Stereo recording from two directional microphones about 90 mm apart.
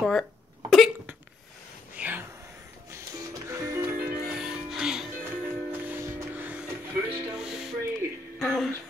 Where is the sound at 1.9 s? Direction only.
20° right (ahead or behind).